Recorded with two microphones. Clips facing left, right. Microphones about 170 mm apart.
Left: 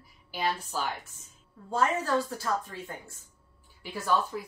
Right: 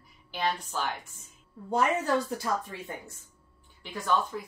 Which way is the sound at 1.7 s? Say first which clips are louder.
Right 1 dB; 20° right (ahead or behind).